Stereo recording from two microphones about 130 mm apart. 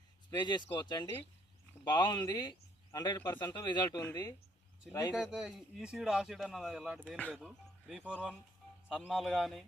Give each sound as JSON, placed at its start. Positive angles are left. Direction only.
{"t": 0.3, "sound": "speech", "side_deg": 35}
{"t": 3.2, "sound": "speech", "side_deg": 20}
{"t": 5.1, "sound": "a man's voice", "side_deg": -5}